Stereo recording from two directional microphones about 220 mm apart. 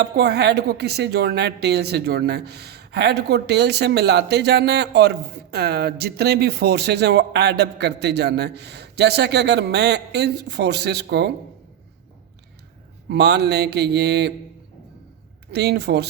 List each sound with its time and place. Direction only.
0.0 s speech: 50° right (ahead or behind)
13.1 s speech: 50° right (ahead or behind)
15.5 s speech: 50° right (ahead or behind)